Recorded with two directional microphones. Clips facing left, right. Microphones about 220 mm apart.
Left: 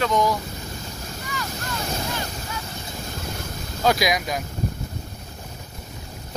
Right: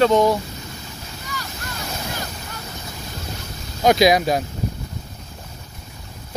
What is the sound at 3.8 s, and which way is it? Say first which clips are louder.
Speech: right 7 dB; 25° right (ahead or behind).